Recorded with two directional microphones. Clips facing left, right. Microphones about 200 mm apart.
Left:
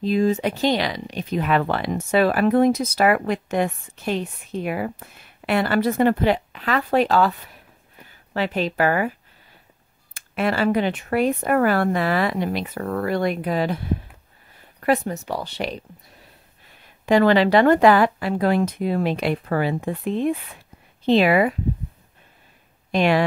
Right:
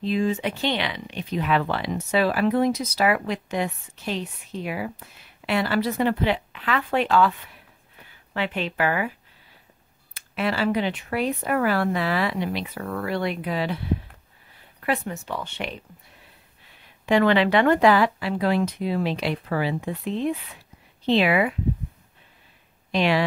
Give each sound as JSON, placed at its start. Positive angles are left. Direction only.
{"t": 0.0, "sound": "speech", "side_deg": 40}
{"t": 10.1, "sound": "speech", "side_deg": 50}
{"t": 17.0, "sound": "speech", "side_deg": 40}
{"t": 22.8, "sound": "speech", "side_deg": 50}